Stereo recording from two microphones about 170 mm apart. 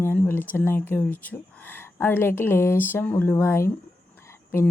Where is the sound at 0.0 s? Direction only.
10° left (ahead or behind).